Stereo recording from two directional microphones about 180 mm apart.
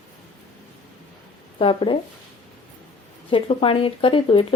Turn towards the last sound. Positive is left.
turn(degrees=30)  # may be behind; listen again after turning